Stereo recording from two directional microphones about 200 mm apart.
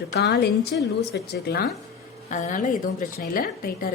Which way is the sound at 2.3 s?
40° left (ahead or behind).